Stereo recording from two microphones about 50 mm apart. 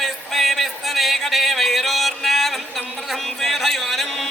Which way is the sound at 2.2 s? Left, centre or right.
Centre.